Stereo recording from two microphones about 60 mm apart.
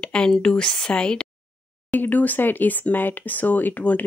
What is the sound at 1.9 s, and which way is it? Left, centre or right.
Speech, left.